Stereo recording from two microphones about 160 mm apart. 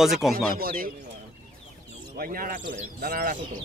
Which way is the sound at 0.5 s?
65° right (ahead or behind).